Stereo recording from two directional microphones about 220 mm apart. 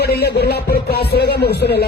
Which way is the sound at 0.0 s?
45° left (ahead or behind).